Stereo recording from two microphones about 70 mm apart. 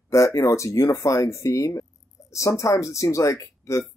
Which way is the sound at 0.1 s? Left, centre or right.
Left.